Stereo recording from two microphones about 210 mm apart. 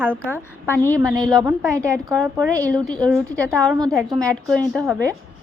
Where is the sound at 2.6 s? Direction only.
5° left (ahead or behind).